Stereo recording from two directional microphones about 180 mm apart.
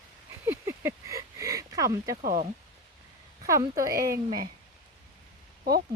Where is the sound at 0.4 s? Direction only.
15° right (ahead or behind).